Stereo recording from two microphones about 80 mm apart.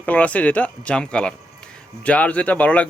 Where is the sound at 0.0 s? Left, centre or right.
Centre.